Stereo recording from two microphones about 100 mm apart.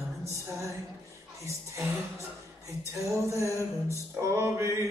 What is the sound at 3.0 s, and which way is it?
Music, 30° right (ahead or behind).